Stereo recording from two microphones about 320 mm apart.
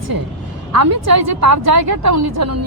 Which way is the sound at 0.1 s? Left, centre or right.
Right.